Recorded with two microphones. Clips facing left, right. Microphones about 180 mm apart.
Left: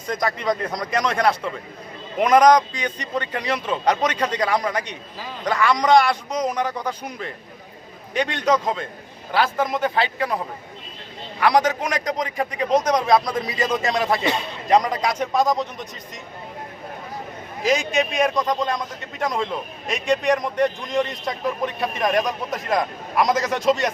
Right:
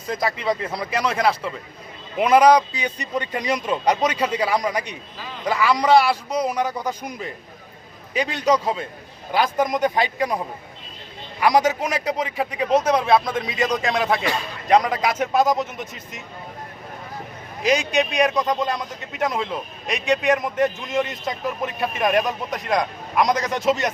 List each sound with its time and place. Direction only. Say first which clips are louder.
0.1 s a man's voice: even; 5° right (ahead or behind)
14.3 s a man's voice: left 2 dB; 20° left (ahead or behind)
14.7 s a man's voice: right 1 dB; centre (ahead or behind)
17.6 s a man's voice: right 1 dB; centre (ahead or behind)